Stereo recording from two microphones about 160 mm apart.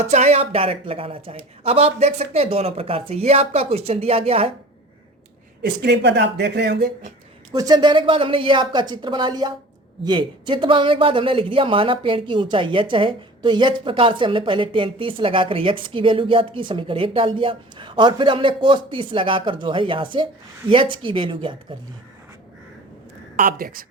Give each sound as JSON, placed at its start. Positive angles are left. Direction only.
{"t": 0.0, "sound": "a man's voice", "side_deg": -45}
{"t": 5.6, "sound": "speech", "side_deg": -90}
{"t": 7.5, "sound": "a man's voice", "side_deg": -25}
{"t": 23.4, "sound": "speech", "side_deg": -65}